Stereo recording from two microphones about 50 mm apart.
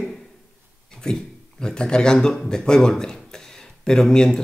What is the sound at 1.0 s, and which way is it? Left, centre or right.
A man's voice, centre.